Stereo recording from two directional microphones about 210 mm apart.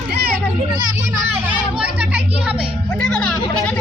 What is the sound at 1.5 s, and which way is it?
Speech, 5° right (ahead or behind).